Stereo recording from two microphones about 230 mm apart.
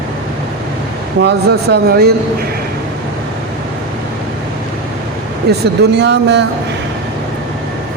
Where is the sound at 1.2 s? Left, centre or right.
Right.